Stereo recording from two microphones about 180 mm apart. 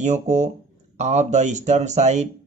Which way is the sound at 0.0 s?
40° right (ahead or behind).